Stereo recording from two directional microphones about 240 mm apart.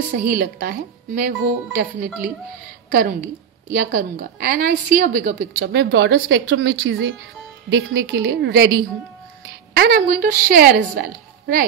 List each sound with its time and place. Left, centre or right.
0.2 s a woman's voice: right
9.8 s speech: right